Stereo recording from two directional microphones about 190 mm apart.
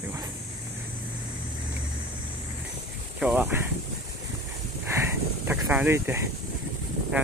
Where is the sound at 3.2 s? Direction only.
5° right (ahead or behind).